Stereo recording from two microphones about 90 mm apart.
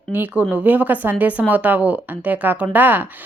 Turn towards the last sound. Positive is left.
turn(degrees=-20)  # may be behind; listen again after turning